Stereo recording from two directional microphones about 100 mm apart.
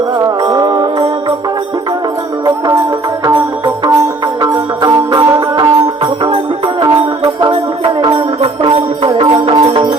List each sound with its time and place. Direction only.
0.4 s music: 45° right (ahead or behind)
4.4 s music: 40° right (ahead or behind)
8.4 s music: 65° right (ahead or behind)
9.1 s music: 55° right (ahead or behind)